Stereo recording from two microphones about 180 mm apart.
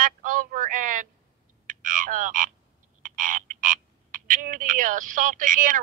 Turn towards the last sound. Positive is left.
turn(degrees=-45)  # may be behind; listen again after turning